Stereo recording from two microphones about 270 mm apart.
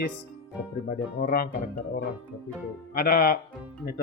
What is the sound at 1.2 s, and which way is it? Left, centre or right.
Speech, left.